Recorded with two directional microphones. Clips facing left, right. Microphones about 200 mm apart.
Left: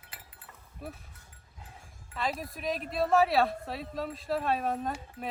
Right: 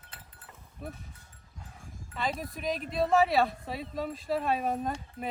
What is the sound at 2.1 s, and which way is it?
Speech, centre (ahead or behind).